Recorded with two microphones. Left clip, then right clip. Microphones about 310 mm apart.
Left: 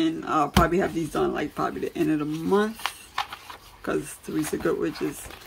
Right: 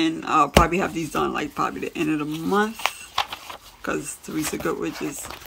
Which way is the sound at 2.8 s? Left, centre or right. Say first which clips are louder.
Right 5 dB; right.